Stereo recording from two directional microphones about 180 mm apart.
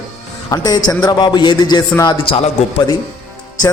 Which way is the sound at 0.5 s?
20° left (ahead or behind).